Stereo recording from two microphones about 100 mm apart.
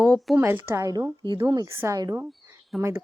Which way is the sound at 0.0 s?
5° left (ahead or behind).